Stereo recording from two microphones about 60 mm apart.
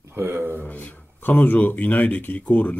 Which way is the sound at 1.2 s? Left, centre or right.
Left.